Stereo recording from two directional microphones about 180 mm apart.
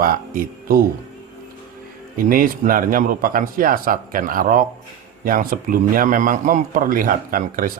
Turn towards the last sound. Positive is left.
turn(degrees=-50)  # may be behind; listen again after turning